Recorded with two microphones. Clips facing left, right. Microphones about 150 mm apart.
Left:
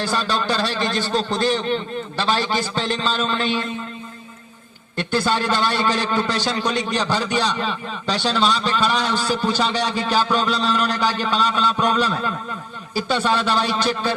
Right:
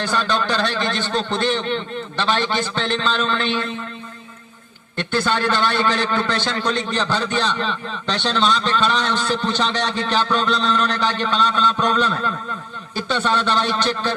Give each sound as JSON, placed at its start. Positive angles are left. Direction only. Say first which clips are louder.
{"t": 0.7, "sound": "a man's voice", "louder": "left 1 dB", "side_deg": 40}
{"t": 5.1, "sound": "a man's voice", "louder": "even", "side_deg": 35}
{"t": 5.6, "sound": "a man's voice", "louder": "right 1 dB", "side_deg": 10}